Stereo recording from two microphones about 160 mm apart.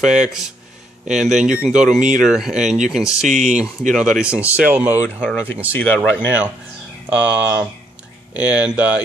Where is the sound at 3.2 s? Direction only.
50° right (ahead or behind).